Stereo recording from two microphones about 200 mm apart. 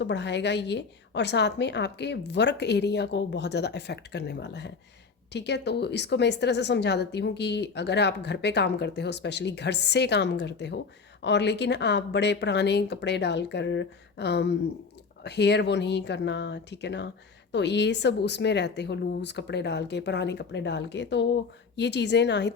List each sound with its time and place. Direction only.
0.0 s a woman's voice: 60° left (ahead or behind)